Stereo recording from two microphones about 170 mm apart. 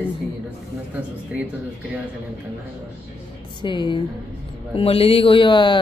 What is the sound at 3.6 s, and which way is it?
Speech, 30° left (ahead or behind).